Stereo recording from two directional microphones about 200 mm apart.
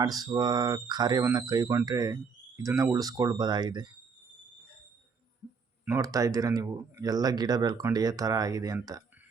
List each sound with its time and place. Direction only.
0.0 s speech: 20° right (ahead or behind)
5.8 s speech: 15° right (ahead or behind)